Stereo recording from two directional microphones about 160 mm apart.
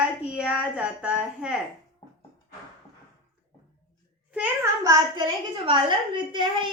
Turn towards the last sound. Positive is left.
turn(degrees=-30)  # may be behind; listen again after turning